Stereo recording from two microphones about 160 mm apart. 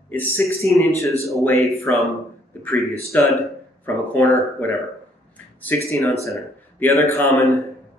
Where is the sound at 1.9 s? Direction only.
10° left (ahead or behind).